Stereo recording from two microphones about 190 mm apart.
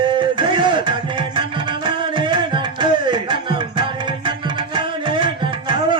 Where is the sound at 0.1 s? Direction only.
25° right (ahead or behind).